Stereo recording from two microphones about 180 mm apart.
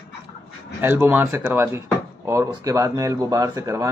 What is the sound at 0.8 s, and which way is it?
Speech, 10° right (ahead or behind).